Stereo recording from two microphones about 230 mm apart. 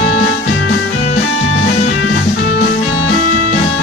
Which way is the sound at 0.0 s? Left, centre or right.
Left.